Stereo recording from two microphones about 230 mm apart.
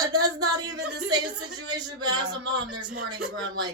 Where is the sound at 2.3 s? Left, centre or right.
Right.